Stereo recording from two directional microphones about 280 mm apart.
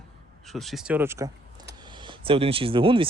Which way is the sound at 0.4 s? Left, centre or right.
Centre.